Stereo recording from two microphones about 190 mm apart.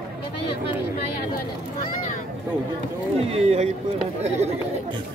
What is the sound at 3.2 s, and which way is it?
Speech, 35° right (ahead or behind).